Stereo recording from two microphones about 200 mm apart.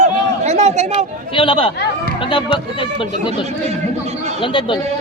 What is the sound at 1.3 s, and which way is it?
Speech, 25° left (ahead or behind).